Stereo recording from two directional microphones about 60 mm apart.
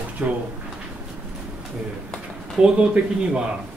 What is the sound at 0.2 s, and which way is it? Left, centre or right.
Speech, right.